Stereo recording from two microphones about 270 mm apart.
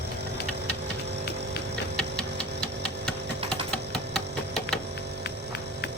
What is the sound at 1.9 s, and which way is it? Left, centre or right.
Tick, centre.